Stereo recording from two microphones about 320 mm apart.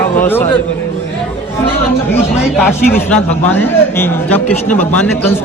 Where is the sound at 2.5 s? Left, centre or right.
Centre.